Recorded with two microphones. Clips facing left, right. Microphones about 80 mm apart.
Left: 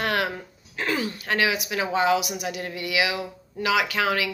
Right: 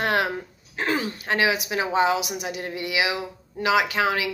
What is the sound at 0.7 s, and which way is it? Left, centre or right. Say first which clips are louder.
A woman's voice: right 1 dB; right.